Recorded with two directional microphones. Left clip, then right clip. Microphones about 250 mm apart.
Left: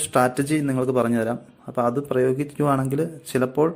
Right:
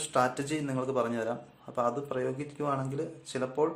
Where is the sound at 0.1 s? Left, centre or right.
Left.